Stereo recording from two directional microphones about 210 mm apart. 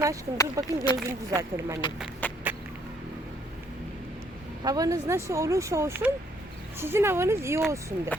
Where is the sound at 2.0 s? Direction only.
5° left (ahead or behind).